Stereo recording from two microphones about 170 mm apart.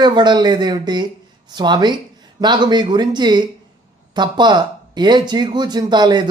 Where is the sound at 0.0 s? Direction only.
25° right (ahead or behind).